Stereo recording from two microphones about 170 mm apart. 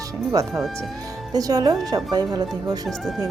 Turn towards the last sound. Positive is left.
turn(degrees=0)  # may be behind; listen again after turning